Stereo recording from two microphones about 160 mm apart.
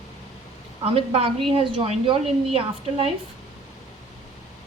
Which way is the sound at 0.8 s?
35° right (ahead or behind).